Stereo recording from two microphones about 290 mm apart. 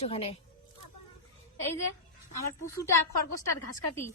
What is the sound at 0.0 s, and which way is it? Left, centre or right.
Speech, centre.